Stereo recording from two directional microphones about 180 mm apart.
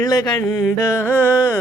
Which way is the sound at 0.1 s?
20° left (ahead or behind).